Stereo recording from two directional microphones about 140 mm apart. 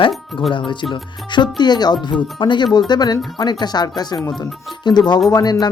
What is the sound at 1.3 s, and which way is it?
Speech, 35° left (ahead or behind).